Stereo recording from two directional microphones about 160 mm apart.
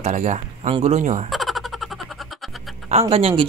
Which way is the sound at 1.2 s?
Centre (ahead or behind).